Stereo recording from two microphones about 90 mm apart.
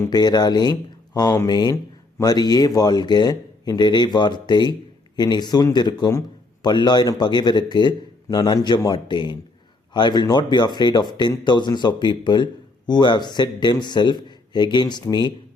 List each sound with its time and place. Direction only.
0.1 s speech: 50° left (ahead or behind)